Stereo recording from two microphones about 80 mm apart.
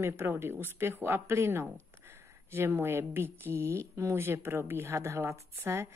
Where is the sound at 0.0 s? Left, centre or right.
Right.